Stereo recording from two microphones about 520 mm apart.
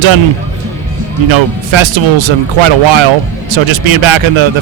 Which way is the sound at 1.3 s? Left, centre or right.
Right.